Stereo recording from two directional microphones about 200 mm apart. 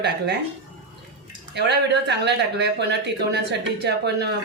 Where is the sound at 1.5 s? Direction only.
60° right (ahead or behind).